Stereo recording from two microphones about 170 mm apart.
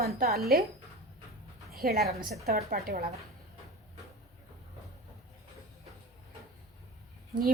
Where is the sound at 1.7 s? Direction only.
65° right (ahead or behind).